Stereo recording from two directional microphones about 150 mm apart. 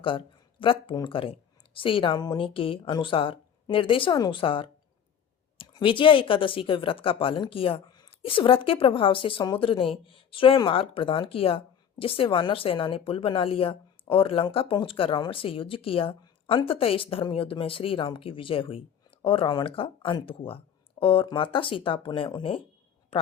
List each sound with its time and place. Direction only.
0.6 s speech: 35° left (ahead or behind)